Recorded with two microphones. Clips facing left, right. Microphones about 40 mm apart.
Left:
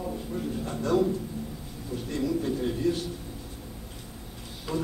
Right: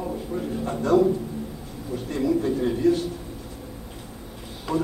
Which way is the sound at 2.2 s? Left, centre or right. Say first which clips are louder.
Right 5 dB; centre.